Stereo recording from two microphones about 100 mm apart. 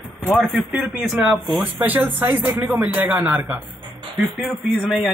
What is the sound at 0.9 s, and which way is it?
Speech, 5° right (ahead or behind).